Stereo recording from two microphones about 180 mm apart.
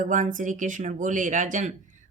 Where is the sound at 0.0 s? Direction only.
45° right (ahead or behind).